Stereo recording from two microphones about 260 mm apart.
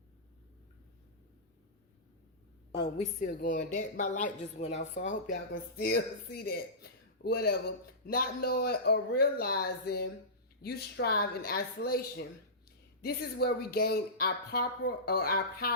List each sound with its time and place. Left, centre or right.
2.8 s speech: left
13.0 s speech: left